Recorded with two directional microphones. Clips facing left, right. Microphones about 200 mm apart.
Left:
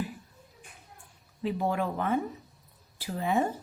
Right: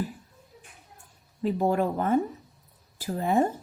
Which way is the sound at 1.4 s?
40° right (ahead or behind).